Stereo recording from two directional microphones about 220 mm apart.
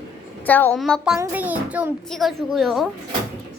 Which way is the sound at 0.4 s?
10° left (ahead or behind).